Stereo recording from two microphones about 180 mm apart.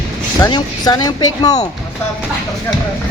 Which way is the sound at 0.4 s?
20° left (ahead or behind).